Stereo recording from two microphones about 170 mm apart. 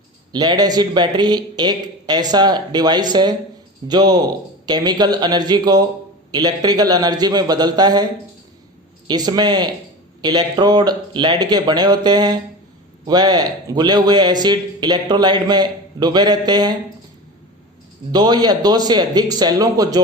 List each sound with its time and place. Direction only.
0.3 s a man's voice: 25° right (ahead or behind)
9.0 s a man's voice: 25° right (ahead or behind)
18.1 s a man's voice: 25° right (ahead or behind)